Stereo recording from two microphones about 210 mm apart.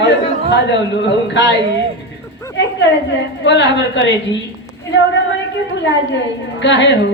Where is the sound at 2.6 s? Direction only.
60° left (ahead or behind).